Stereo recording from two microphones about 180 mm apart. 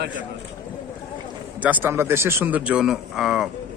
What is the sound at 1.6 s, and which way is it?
Speech, 10° right (ahead or behind).